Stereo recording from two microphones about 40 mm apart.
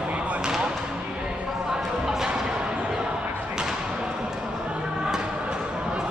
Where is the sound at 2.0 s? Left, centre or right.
Centre.